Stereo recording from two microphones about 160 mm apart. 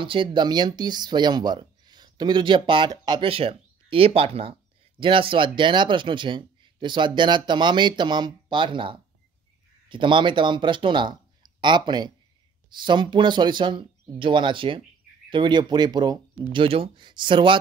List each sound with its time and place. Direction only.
0.0 s speech: 30° right (ahead or behind)